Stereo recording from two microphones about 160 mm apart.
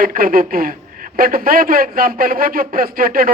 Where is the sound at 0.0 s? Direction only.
60° right (ahead or behind).